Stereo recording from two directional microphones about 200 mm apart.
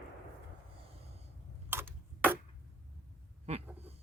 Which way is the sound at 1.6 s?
10° right (ahead or behind).